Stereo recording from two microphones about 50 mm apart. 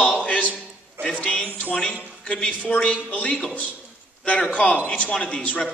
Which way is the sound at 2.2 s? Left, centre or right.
Left.